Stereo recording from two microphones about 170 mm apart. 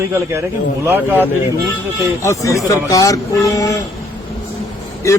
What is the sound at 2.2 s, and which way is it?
A man's voice, 20° left (ahead or behind).